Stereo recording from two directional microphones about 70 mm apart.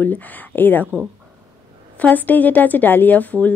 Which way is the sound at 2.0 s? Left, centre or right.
Left.